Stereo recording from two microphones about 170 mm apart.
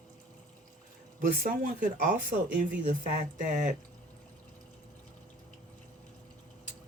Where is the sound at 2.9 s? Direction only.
50° right (ahead or behind).